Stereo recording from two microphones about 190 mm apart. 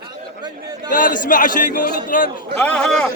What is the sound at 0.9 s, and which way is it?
A man's voice, 45° left (ahead or behind).